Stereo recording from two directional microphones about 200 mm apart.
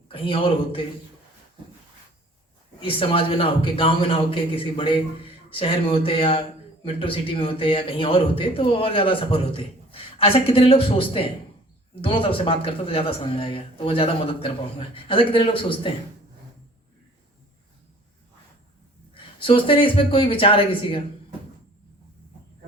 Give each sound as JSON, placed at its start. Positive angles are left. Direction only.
{"t": 0.1, "sound": "a man's voice", "side_deg": 25}
{"t": 2.8, "sound": "a man's voice", "side_deg": 25}
{"t": 19.1, "sound": "a man's voice", "side_deg": 25}